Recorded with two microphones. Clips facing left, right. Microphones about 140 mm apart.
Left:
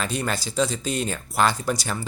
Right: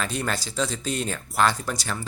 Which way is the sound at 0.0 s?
5° left (ahead or behind).